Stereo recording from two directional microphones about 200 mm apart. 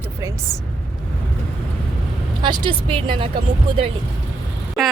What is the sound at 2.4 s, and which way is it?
Speech, 25° right (ahead or behind).